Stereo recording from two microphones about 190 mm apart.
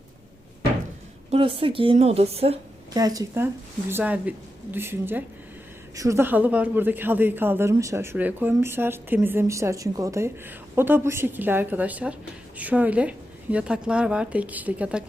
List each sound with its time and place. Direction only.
1.3 s a woman's voice: 30° right (ahead or behind)
2.9 s a woman's voice: 20° right (ahead or behind)